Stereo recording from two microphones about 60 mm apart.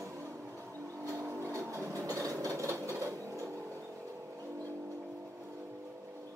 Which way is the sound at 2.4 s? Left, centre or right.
Right.